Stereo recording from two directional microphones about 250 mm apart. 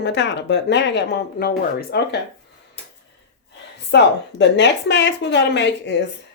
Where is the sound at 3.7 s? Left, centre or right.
Left.